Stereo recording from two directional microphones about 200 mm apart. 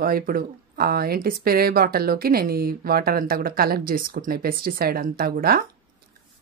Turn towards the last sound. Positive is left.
turn(degrees=-50)  # may be behind; listen again after turning